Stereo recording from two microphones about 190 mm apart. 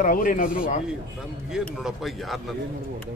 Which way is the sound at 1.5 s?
Centre (ahead or behind).